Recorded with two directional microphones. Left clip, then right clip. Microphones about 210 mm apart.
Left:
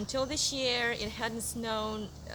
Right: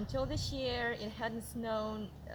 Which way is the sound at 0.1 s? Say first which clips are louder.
Left 7 dB; 10° left (ahead or behind).